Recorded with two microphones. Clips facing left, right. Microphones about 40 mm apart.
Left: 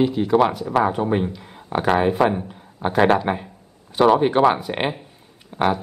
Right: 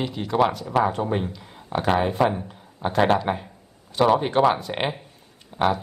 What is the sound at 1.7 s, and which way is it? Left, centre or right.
Speech, left.